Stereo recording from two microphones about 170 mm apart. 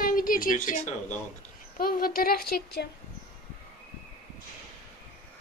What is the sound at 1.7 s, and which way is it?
Speech, 60° left (ahead or behind).